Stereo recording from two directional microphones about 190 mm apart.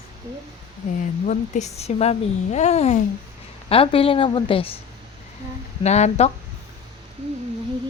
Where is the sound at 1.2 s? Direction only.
40° left (ahead or behind).